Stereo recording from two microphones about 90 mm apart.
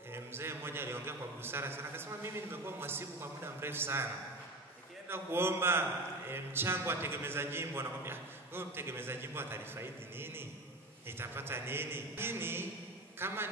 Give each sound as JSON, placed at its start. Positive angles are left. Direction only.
{"t": 0.1, "sound": "a man's voice", "side_deg": -25}
{"t": 5.0, "sound": "a man's voice", "side_deg": -25}